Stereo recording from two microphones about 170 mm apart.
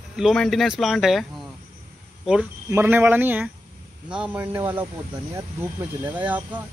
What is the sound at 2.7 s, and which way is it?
Speech, 10° right (ahead or behind).